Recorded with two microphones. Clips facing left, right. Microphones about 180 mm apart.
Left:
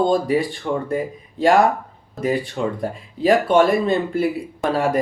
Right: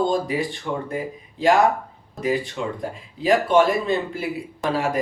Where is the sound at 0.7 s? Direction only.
50° left (ahead or behind).